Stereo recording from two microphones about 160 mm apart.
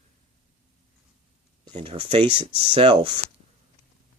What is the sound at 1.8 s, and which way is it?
Speech, 35° right (ahead or behind).